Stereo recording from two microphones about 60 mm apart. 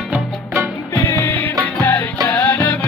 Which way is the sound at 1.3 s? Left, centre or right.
Left.